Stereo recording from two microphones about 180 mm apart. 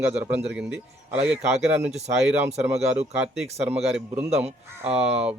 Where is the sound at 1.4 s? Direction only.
35° right (ahead or behind).